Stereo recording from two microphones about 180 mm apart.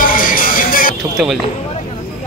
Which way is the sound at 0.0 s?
50° left (ahead or behind).